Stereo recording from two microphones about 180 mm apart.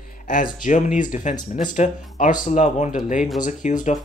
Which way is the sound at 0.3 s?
45° left (ahead or behind).